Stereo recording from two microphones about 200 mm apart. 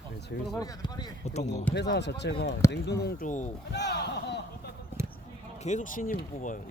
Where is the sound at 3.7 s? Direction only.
55° left (ahead or behind).